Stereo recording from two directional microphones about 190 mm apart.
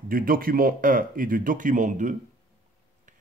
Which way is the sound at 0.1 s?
50° right (ahead or behind).